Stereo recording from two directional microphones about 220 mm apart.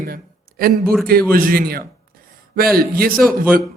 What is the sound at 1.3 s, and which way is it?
A man's voice, 40° right (ahead or behind).